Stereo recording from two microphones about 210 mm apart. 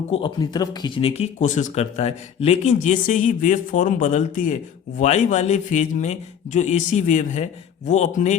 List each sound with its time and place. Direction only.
0.1 s speech: 20° left (ahead or behind)